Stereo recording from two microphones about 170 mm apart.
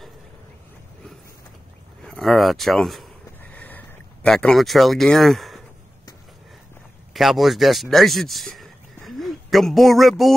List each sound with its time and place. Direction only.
2.0 s speech: centre (ahead or behind)
3.5 s a sound: 10° left (ahead or behind)
7.2 s speech: centre (ahead or behind)